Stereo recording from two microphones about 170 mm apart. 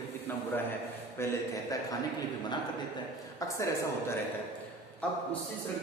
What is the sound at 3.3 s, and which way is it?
Speech, 20° left (ahead or behind).